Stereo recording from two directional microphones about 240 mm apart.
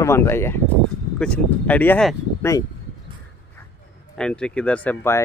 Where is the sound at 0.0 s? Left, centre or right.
Centre.